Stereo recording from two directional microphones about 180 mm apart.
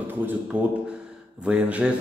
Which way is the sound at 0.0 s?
10° right (ahead or behind).